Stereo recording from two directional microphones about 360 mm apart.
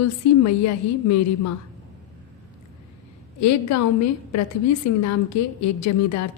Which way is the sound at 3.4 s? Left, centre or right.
Left.